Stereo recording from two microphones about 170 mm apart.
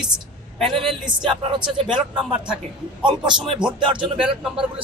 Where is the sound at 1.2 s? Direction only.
30° right (ahead or behind).